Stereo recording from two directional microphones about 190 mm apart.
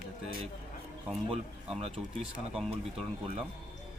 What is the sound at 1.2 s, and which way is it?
Speech, 35° right (ahead or behind).